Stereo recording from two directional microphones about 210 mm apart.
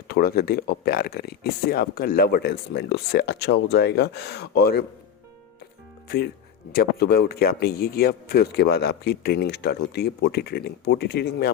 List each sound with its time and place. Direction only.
0.1 s speech: 45° left (ahead or behind)
6.1 s speech: 50° left (ahead or behind)